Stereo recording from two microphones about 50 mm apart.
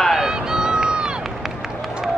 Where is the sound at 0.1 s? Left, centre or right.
Centre.